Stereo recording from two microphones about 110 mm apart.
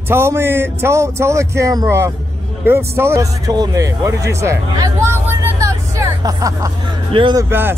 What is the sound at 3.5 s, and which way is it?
A man's voice, 35° right (ahead or behind).